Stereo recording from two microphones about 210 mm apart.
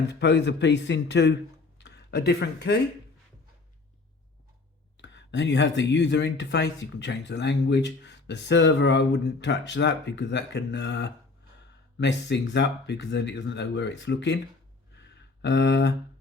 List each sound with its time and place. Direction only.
0.1 s speech: 55° left (ahead or behind)
4.9 s speech: 60° left (ahead or behind)
14.9 s a sound: 55° left (ahead or behind)